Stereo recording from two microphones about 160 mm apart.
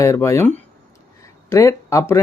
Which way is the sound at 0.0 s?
20° left (ahead or behind).